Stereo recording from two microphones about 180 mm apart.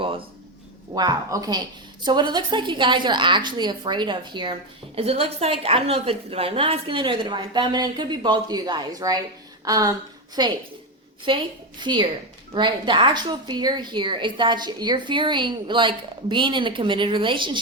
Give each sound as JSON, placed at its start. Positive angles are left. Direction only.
{"t": 0.9, "sound": "a woman's voice", "side_deg": -20}